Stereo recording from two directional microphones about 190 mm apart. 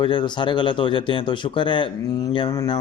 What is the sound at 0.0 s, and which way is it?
Speech, 25° left (ahead or behind).